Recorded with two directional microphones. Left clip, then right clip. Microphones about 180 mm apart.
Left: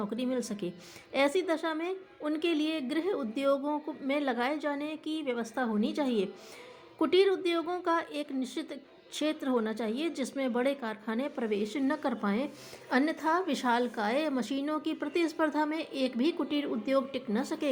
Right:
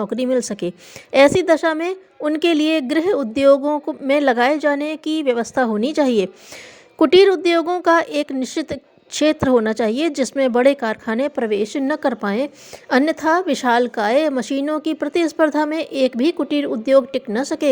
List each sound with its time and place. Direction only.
0.0 s speech: 45° right (ahead or behind)